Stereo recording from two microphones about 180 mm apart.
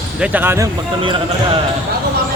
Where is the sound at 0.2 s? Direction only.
10° right (ahead or behind).